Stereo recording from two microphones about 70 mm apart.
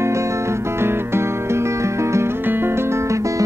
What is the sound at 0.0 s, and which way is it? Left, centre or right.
Music, right.